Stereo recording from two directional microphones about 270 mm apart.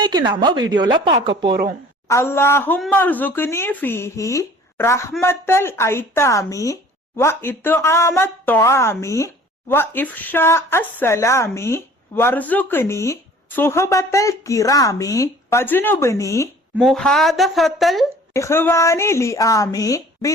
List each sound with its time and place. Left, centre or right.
0.0 s speech: centre
2.0 s a woman's voice: centre